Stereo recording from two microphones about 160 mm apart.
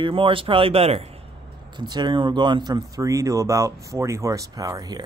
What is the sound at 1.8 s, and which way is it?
Speech, 30° right (ahead or behind).